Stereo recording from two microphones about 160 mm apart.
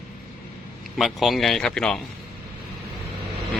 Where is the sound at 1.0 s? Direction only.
Centre (ahead or behind).